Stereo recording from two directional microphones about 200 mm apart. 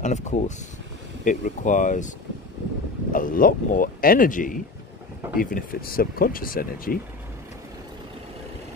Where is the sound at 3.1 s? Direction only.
45° left (ahead or behind).